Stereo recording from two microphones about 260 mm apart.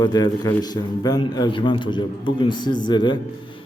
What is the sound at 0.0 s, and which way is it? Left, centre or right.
A man's voice, centre.